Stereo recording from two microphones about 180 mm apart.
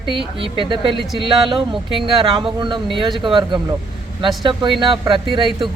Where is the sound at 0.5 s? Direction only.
30° right (ahead or behind).